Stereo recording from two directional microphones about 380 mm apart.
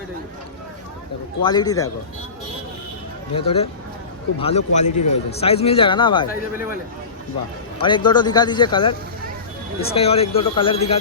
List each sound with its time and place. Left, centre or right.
1.4 s speech: centre
3.3 s speech: centre
7.8 s speech: centre